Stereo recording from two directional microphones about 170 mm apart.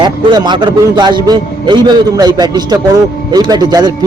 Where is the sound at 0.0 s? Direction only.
25° right (ahead or behind).